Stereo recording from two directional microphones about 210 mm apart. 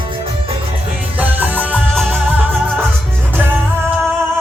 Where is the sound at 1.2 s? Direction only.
10° right (ahead or behind).